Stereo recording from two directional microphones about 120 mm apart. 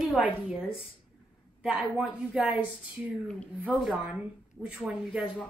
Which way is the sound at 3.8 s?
5° right (ahead or behind).